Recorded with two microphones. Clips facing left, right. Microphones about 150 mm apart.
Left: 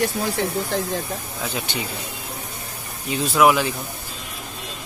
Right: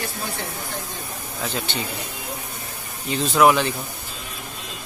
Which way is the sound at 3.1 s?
5° left (ahead or behind).